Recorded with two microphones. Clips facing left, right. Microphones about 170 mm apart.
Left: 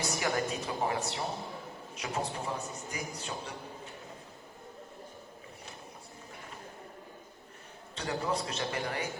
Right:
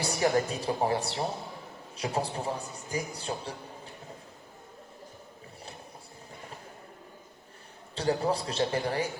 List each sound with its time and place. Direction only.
0.0 s a man's voice: 30° right (ahead or behind)
7.9 s a man's voice: 35° right (ahead or behind)